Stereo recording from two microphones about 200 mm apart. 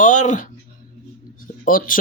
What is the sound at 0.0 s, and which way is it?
Speech, 40° left (ahead or behind).